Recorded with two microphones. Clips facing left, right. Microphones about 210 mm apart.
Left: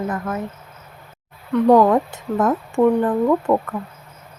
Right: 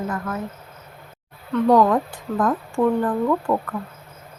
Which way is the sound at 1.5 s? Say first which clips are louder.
Left 3 dB; 15° left (ahead or behind).